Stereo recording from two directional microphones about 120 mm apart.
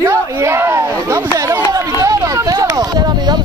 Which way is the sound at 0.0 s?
25° right (ahead or behind).